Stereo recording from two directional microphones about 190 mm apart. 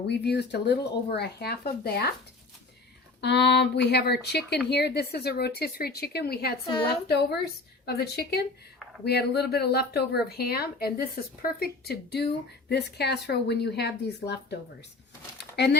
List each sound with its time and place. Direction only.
0.1 s a woman's voice: 60° left (ahead or behind)
3.2 s a woman's voice: 60° left (ahead or behind)
15.5 s speech: 60° left (ahead or behind)